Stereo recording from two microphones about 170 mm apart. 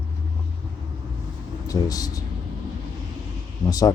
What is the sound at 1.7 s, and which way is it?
Speech, 20° left (ahead or behind).